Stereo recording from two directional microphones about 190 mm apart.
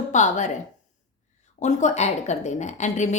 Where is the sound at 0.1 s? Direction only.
40° left (ahead or behind).